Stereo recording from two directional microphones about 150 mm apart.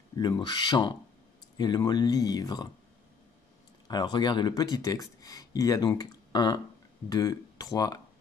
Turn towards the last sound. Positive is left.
turn(degrees=25)  # may be behind; listen again after turning